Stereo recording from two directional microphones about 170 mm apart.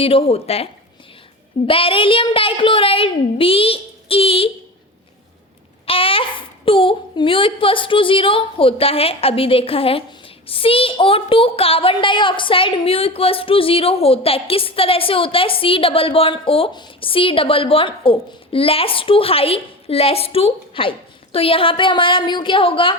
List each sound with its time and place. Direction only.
0.0 s a woman's voice: 35° left (ahead or behind)
5.8 s a sound: 35° left (ahead or behind)
6.7 s a woman's voice: 30° left (ahead or behind)